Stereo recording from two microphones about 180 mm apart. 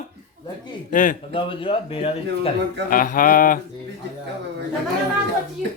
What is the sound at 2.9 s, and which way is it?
Speech, 50° left (ahead or behind).